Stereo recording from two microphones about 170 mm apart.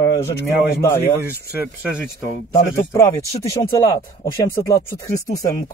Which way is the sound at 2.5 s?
20° left (ahead or behind).